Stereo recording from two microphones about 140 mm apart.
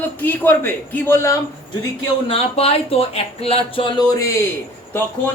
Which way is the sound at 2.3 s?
45° left (ahead or behind).